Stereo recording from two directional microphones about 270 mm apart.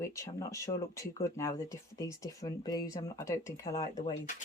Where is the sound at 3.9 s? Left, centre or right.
Left.